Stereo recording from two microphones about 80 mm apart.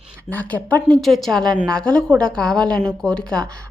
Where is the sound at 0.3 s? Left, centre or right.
Centre.